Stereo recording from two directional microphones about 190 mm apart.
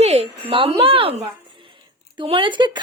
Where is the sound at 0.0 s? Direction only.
35° right (ahead or behind).